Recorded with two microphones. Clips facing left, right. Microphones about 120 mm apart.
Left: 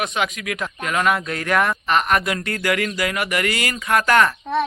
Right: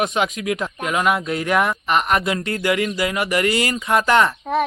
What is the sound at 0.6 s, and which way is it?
Speech, 15° right (ahead or behind).